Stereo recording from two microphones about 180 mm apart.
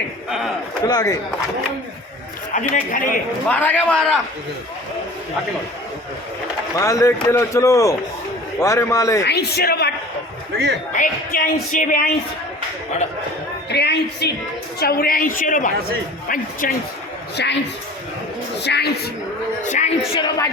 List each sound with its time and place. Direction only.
0.3 s speech: centre (ahead or behind)
0.9 s speech: 20° left (ahead or behind)
2.5 s speech: 45° left (ahead or behind)
3.5 s a man's voice: 10° left (ahead or behind)
6.7 s a man's voice: 15° left (ahead or behind)
9.2 s a woman's voice: 65° left (ahead or behind)
10.9 s speech: 50° left (ahead or behind)
13.7 s a woman's voice: 65° left (ahead or behind); by 16.7 s 50° left (ahead or behind)
17.4 s a woman's voice: 75° left (ahead or behind)
18.6 s a woman's voice: 65° left (ahead or behind)
19.6 s speech: 40° left (ahead or behind)
20.1 s speech: 20° left (ahead or behind)